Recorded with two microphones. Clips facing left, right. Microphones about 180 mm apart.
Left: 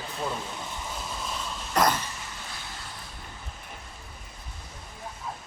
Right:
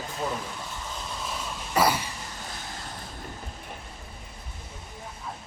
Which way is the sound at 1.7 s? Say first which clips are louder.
Right 1 dB; 10° right (ahead or behind).